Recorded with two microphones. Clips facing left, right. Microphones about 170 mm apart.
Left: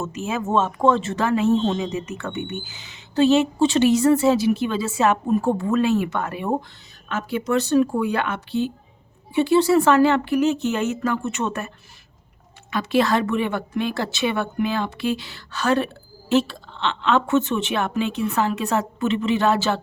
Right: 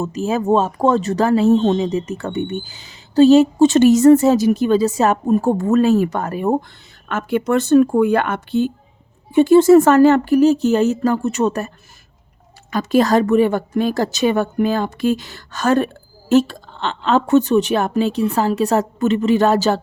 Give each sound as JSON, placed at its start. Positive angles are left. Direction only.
{"t": 0.0, "sound": "speech", "side_deg": -35}
{"t": 7.1, "sound": "speech", "side_deg": -55}
{"t": 12.7, "sound": "speech", "side_deg": -40}